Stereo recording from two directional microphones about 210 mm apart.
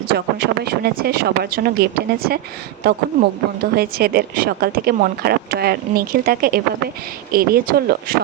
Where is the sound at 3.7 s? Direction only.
45° right (ahead or behind).